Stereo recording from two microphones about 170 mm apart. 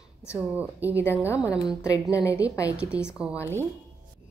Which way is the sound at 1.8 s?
20° left (ahead or behind).